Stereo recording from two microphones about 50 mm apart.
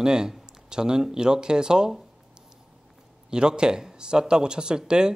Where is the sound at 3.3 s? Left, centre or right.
Centre.